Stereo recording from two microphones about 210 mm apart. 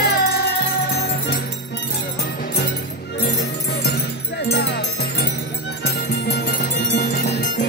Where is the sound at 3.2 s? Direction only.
50° left (ahead or behind).